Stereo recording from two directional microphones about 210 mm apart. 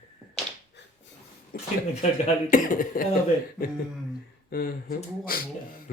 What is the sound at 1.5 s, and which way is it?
Speech, 45° left (ahead or behind).